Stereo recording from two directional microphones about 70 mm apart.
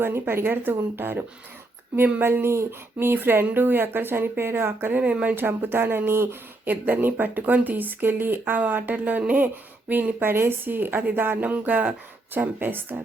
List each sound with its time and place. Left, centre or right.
0.0 s speech: right
2.2 s speech: right
5.0 s speech: centre
5.3 s a woman's voice: right